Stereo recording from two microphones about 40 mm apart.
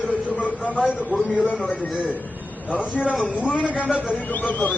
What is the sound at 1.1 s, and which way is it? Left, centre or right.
Speech, left.